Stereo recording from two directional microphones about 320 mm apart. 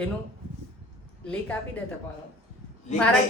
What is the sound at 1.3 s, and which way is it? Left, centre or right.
Speech, centre.